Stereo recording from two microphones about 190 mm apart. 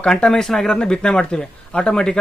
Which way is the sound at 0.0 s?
5° left (ahead or behind).